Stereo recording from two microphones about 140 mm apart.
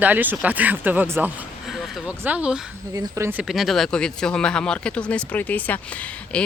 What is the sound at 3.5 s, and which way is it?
Speech, centre (ahead or behind).